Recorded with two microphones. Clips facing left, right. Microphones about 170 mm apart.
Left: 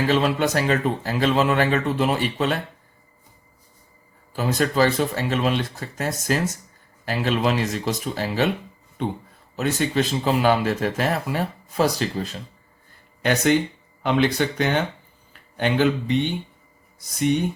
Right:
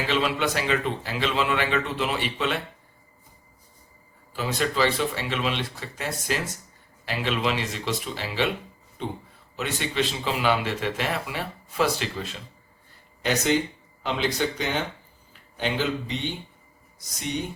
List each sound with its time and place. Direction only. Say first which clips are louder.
0.1 s speech: left 1 dB; 45° left (ahead or behind)
4.4 s speech: left 5 dB; 45° left (ahead or behind)
9.0 s speech: left 6 dB; 55° left (ahead or behind)
9.6 s speech: left 5 dB; 45° left (ahead or behind)
13.2 s speech: left 4 dB; 55° left (ahead or behind)